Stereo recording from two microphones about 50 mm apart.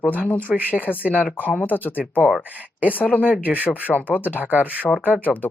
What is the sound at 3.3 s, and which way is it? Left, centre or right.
Speech, right.